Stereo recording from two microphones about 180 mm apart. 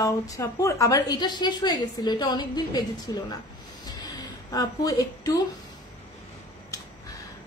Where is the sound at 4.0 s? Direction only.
20° left (ahead or behind).